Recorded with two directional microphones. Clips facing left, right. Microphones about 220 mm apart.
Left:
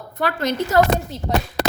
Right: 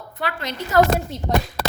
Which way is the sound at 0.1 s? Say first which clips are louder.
Left 6 dB; 45° left (ahead or behind).